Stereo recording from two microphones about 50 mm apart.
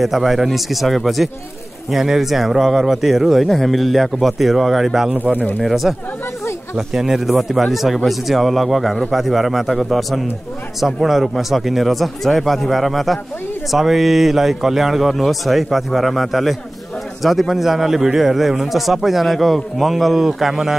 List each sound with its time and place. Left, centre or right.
0.0 s a man's voice: centre
3.4 s a man's voice: centre
5.1 s speech: right
5.6 s a man's voice: centre